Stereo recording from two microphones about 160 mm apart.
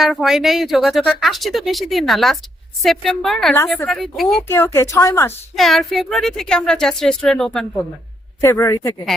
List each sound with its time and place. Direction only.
0.0 s speech: centre (ahead or behind)
4.4 s speech: 15° left (ahead or behind)
5.5 s speech: centre (ahead or behind)
8.4 s speech: 20° left (ahead or behind)